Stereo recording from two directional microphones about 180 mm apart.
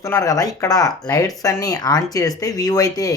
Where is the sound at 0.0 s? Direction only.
20° left (ahead or behind).